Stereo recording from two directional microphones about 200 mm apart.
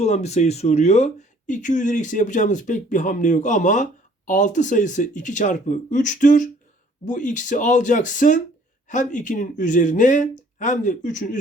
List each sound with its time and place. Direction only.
0.0 s speech: 35° left (ahead or behind)